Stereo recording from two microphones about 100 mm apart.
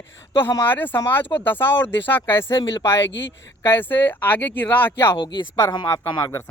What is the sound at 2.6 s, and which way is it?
Speech, 45° left (ahead or behind).